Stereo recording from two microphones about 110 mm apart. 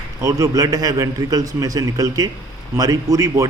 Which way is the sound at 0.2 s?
30° right (ahead or behind).